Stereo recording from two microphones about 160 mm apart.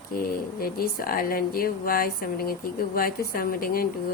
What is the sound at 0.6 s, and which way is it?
Speech, 65° left (ahead or behind).